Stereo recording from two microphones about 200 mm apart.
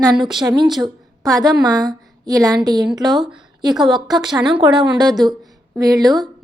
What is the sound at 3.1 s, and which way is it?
Speech, centre (ahead or behind).